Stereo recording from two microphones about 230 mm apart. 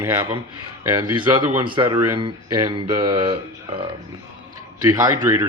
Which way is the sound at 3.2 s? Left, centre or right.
Right.